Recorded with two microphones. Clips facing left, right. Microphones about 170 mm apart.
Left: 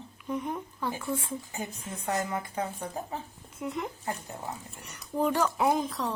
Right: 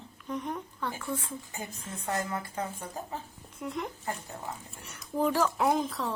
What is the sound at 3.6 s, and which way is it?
Speech, centre (ahead or behind).